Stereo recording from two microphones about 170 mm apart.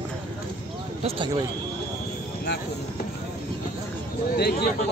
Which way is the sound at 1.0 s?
35° right (ahead or behind).